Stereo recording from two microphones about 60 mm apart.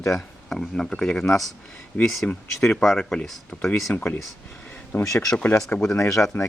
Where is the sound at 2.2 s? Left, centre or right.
Left.